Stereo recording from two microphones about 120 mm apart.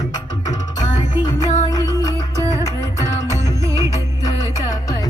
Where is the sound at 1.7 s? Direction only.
25° left (ahead or behind).